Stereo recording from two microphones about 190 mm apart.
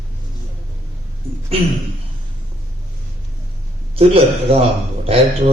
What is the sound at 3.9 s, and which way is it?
A man's voice, 30° right (ahead or behind).